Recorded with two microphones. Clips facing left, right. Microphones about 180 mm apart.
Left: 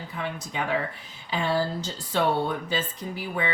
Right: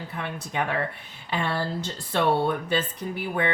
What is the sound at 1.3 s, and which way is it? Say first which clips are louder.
Speech: left 2 dB; 60° right (ahead or behind).